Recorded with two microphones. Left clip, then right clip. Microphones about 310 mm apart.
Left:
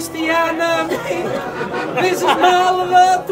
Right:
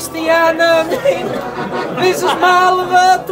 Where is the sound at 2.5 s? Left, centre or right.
Centre.